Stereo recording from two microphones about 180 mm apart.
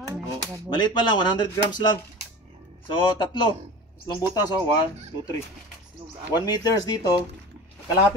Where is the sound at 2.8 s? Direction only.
25° left (ahead or behind).